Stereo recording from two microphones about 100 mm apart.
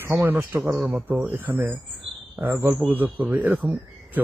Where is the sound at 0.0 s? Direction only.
25° right (ahead or behind).